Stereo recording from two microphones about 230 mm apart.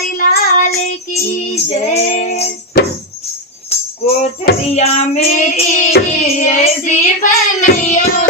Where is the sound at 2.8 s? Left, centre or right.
Left.